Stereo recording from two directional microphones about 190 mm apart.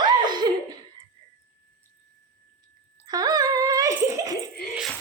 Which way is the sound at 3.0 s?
20° right (ahead or behind).